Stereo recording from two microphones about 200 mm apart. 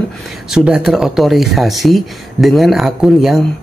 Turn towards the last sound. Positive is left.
turn(degrees=0)  # may be behind; listen again after turning